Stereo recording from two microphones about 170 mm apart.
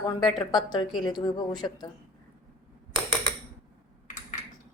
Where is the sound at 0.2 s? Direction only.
25° left (ahead or behind).